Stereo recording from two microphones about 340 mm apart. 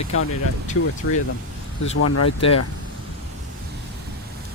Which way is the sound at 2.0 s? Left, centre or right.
Left.